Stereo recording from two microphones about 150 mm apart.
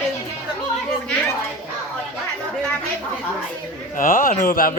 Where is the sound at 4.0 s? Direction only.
65° left (ahead or behind).